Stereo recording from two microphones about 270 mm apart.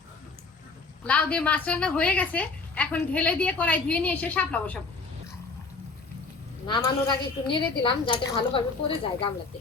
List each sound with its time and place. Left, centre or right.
1.0 s a woman's voice: centre
6.7 s a woman's voice: centre